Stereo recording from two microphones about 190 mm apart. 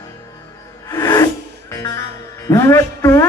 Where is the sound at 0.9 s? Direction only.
20° left (ahead or behind).